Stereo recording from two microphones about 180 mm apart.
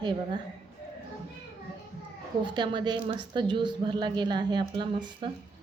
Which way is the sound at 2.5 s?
25° right (ahead or behind).